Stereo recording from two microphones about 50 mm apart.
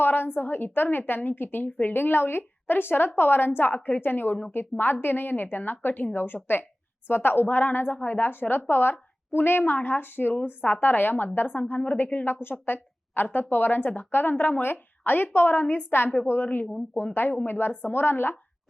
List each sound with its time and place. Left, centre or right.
0.0 s a woman's voice: left